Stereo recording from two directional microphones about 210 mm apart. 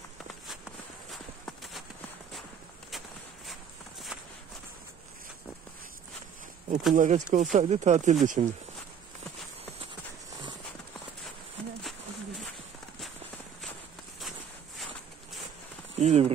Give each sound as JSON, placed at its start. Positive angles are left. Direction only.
{"t": 0.5, "sound": "walk", "side_deg": 0}
{"t": 1.6, "sound": "clip-clop", "side_deg": 0}
{"t": 6.9, "sound": "speech", "side_deg": -35}
{"t": 16.0, "sound": "speech", "side_deg": -30}